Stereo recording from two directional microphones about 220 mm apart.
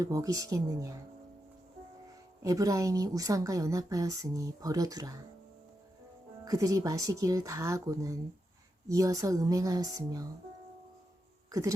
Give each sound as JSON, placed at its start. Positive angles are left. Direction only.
{"t": 0.0, "sound": "a woman's voice", "side_deg": -15}
{"t": 2.4, "sound": "a woman's voice", "side_deg": -15}
{"t": 6.4, "sound": "a woman's voice", "side_deg": -15}